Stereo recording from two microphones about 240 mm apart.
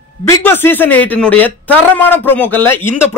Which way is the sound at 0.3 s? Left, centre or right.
Centre.